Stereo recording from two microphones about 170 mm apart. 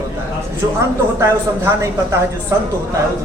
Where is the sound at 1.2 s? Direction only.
15° right (ahead or behind).